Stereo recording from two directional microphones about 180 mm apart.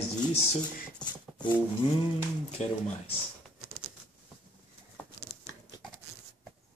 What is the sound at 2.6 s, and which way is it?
Speech, 40° left (ahead or behind).